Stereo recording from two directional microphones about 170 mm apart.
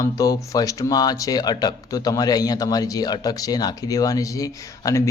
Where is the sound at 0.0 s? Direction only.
20° left (ahead or behind).